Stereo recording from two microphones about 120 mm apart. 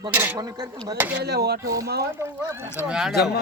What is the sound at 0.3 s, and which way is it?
Speech, 35° right (ahead or behind).